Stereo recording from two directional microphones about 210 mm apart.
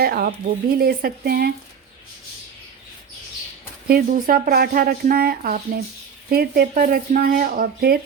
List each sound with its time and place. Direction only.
0.0 s speech: 45° right (ahead or behind)
3.8 s speech: 45° right (ahead or behind)